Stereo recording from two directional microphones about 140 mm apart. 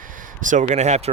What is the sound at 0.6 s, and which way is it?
Speech, 55° right (ahead or behind).